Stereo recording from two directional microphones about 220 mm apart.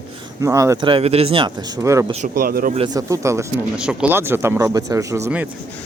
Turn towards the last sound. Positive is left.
turn(degrees=-10)  # may be behind; listen again after turning